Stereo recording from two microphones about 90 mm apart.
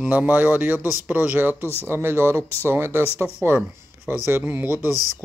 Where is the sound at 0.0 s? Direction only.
15° right (ahead or behind).